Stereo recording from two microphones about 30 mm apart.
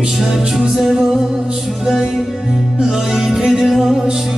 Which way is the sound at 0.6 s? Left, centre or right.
Centre.